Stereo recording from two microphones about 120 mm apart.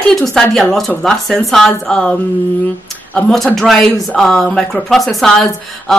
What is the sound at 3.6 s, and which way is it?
A woman's voice, 5° left (ahead or behind).